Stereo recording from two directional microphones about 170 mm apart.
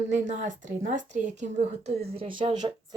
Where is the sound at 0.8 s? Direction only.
50° right (ahead or behind).